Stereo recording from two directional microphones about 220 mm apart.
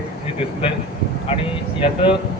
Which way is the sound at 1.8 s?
25° left (ahead or behind).